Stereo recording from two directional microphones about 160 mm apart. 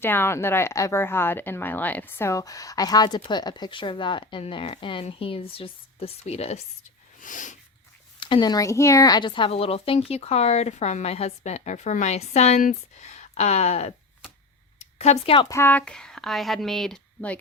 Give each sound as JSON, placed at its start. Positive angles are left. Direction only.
{"t": 0.0, "sound": "a woman's voice", "side_deg": 15}
{"t": 7.2, "sound": "snort", "side_deg": 55}
{"t": 8.2, "sound": "speech", "side_deg": 30}
{"t": 14.8, "sound": "a sound", "side_deg": 45}
{"t": 15.4, "sound": "speech", "side_deg": 20}